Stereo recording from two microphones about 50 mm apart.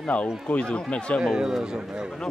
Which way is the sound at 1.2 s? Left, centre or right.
Centre.